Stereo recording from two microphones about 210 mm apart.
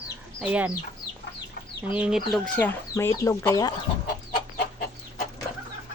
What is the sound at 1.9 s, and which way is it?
Speech, 5° right (ahead or behind).